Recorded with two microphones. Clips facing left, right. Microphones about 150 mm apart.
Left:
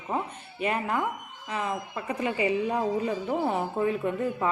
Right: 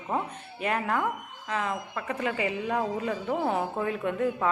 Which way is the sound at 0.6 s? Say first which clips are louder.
Even; 5° left (ahead or behind).